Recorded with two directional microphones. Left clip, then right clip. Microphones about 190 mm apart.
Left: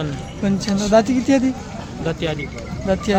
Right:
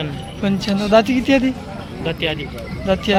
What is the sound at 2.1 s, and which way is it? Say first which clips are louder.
Speech: right 2 dB; 40° left (ahead or behind).